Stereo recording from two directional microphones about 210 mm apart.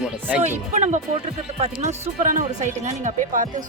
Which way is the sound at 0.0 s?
5° right (ahead or behind).